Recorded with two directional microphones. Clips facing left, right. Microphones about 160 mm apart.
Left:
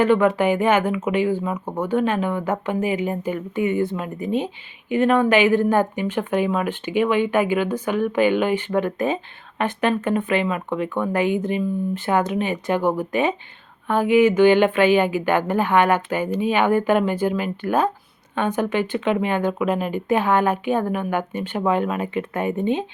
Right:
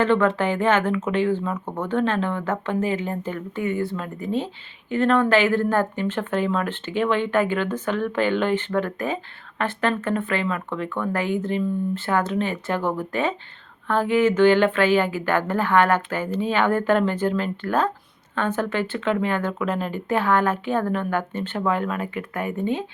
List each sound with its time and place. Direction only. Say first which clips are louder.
0.0 s speech: left 3 dB; 10° left (ahead or behind)